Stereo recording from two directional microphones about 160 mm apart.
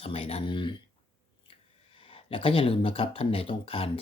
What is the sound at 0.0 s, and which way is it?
Speech, 40° left (ahead or behind).